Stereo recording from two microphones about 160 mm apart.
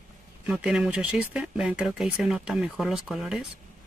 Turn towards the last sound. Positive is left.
turn(degrees=0)  # may be behind; listen again after turning